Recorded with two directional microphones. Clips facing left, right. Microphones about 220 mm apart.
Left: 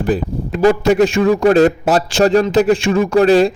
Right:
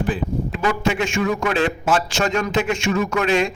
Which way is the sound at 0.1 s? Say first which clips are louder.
Left 5 dB; 40° left (ahead or behind).